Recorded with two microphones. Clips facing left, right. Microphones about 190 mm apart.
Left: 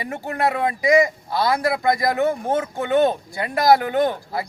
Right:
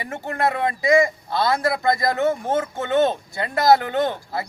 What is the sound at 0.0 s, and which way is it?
A man's voice, 15° left (ahead or behind).